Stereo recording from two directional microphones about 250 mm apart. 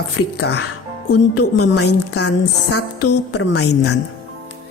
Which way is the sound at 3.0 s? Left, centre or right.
Left.